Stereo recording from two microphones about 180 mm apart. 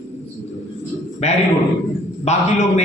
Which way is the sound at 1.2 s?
35° left (ahead or behind).